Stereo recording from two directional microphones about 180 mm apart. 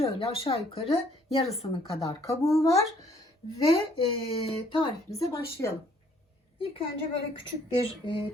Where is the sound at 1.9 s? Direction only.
15° left (ahead or behind).